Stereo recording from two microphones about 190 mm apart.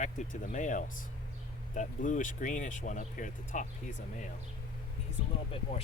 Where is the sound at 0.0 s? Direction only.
40° left (ahead or behind).